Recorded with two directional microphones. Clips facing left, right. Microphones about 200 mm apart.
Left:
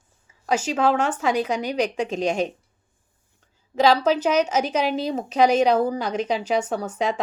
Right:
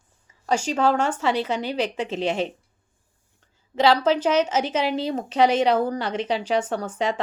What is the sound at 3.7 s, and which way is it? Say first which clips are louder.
A woman's voice: left 1 dB; 10° left (ahead or behind).